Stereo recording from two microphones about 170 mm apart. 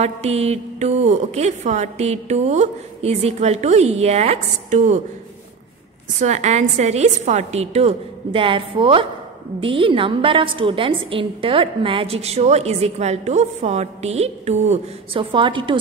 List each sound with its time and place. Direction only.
0.0 s a woman's voice: 40° right (ahead or behind)
6.2 s a woman's voice: 45° right (ahead or behind)